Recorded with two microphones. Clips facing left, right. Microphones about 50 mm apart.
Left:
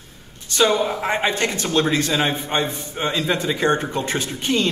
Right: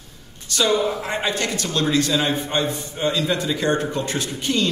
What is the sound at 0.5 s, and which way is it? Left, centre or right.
A man's voice, left.